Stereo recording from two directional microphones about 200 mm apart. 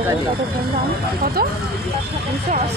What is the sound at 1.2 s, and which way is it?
Speech, 50° right (ahead or behind).